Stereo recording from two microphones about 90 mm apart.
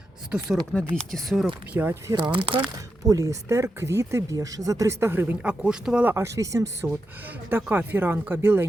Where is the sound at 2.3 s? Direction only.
75° right (ahead or behind).